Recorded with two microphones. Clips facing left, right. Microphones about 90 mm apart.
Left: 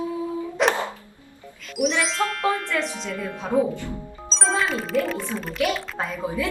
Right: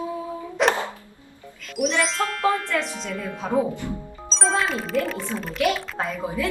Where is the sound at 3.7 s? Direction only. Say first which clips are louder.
Right 1 dB; 20° right (ahead or behind).